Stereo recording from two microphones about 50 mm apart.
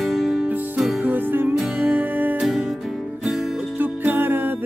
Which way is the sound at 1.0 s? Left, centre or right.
Right.